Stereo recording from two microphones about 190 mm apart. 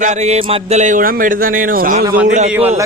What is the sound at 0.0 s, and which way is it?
A man's voice, 40° right (ahead or behind).